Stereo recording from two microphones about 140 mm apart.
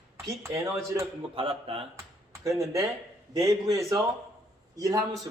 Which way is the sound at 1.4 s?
45° right (ahead or behind).